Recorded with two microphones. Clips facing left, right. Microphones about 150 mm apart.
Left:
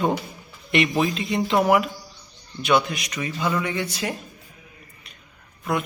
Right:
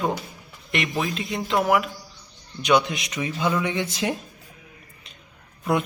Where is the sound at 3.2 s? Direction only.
10° right (ahead or behind).